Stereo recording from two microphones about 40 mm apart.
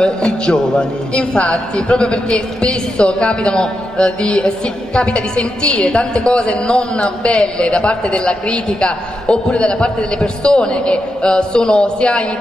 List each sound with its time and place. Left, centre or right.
0.0 s a man's voice: left